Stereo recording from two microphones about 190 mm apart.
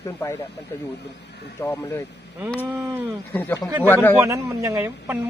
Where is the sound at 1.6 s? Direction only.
10° left (ahead or behind).